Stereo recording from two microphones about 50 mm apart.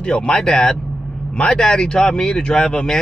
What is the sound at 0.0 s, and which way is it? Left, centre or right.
Speech, centre.